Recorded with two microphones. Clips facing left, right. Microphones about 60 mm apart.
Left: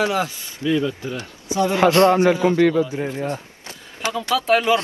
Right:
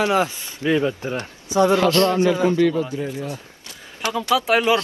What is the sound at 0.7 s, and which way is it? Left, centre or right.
Speech, right.